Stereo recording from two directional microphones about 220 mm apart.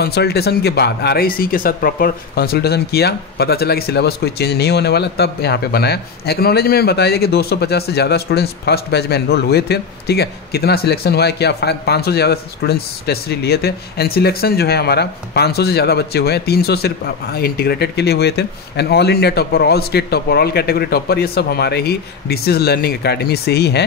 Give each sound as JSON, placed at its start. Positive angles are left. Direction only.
{"t": 0.0, "sound": "speech", "side_deg": 45}